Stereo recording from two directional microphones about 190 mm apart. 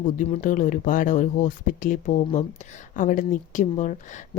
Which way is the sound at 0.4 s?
45° left (ahead or behind).